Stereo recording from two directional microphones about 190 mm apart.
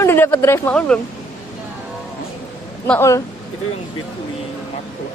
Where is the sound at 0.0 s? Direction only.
10° left (ahead or behind).